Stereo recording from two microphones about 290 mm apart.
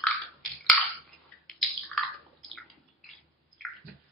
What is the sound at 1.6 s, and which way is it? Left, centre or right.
Drip, centre.